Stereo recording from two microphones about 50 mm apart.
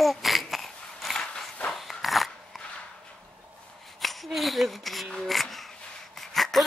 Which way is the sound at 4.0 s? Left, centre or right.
Centre.